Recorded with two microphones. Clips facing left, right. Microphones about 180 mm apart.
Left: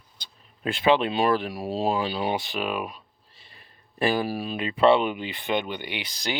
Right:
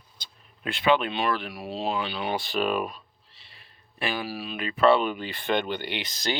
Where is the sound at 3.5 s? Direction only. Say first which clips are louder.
Left 4 dB; 40° left (ahead or behind).